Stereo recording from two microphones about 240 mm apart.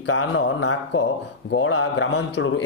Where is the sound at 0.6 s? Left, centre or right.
Left.